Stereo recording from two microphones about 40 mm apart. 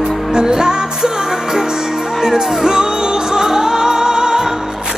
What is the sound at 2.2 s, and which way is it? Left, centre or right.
Speech, centre.